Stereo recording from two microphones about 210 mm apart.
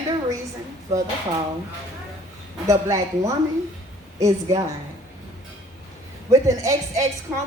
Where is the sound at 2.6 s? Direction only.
15° right (ahead or behind).